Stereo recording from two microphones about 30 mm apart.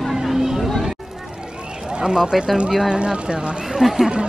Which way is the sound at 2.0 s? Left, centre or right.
Right.